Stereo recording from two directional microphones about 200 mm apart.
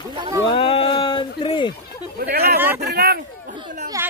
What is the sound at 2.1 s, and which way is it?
Speech, 50° right (ahead or behind).